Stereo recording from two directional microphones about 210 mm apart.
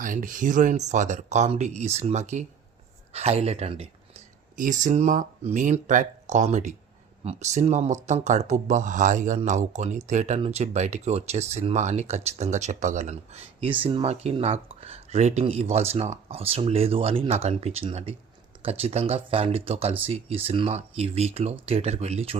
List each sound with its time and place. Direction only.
0.0 s speech: 40° right (ahead or behind)